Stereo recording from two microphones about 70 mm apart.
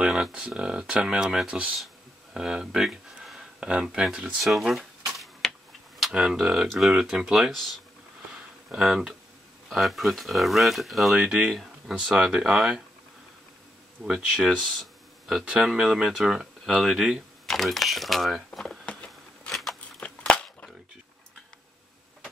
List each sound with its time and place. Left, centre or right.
0.0 s speech: centre
5.1 s tick-tock: centre
5.9 s speech: centre
8.3 s a sound: centre
9.7 s speech: centre
14.0 s speech: centre
14.6 s a sound: centre
15.6 s speech: centre
18.5 s a sound: centre
19.5 s biting: centre
20.0 s crushing: centre